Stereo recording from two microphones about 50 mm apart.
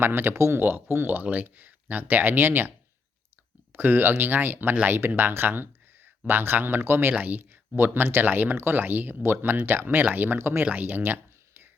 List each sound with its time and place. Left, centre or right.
0.0 s speech: right
0.3 s speech: right
0.6 s speech: right
1.2 s speech: right
7.1 s speech: right
7.8 s speech: right
10.3 s speech: right
10.6 s speech: right
10.9 s a sound: right